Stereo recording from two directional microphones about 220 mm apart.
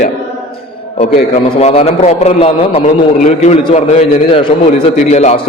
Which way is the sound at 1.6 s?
30° left (ahead or behind).